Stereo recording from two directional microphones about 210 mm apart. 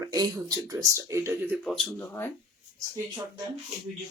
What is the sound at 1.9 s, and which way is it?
Speech, 10° left (ahead or behind).